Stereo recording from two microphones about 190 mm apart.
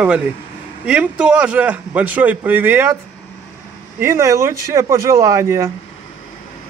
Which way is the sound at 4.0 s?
15° right (ahead or behind).